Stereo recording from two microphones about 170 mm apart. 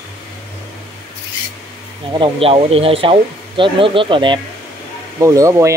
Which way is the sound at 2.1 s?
30° right (ahead or behind).